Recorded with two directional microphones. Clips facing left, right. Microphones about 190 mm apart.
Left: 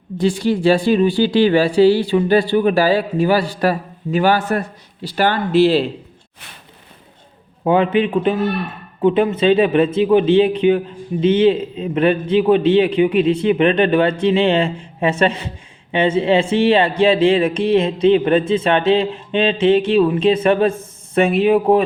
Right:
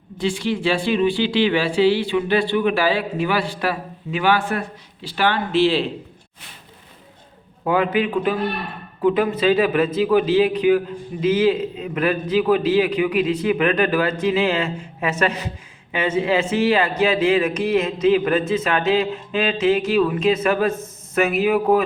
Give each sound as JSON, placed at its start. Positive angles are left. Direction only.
{"t": 0.2, "sound": "speech", "side_deg": 40}
{"t": 7.6, "sound": "a man's voice", "side_deg": 25}